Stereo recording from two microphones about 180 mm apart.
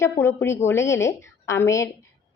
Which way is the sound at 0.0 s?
15° left (ahead or behind).